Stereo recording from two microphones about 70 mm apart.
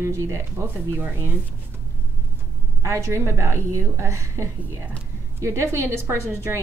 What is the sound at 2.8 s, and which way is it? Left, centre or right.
Speech, right.